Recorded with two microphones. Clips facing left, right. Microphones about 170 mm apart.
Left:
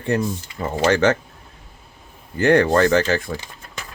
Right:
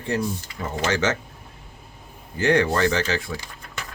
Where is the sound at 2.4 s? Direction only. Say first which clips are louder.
Left 5 dB; 50° left (ahead or behind).